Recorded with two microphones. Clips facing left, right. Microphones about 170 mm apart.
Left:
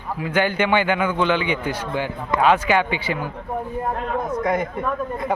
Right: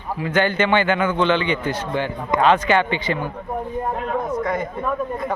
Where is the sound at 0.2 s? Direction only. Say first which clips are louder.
Right 1 dB; 10° left (ahead or behind).